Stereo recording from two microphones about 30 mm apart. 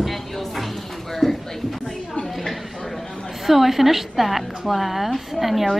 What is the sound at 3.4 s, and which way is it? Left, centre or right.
A woman's voice, centre.